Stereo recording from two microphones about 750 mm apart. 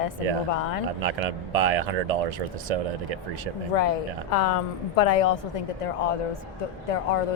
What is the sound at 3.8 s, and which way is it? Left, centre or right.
A woman's voice, left.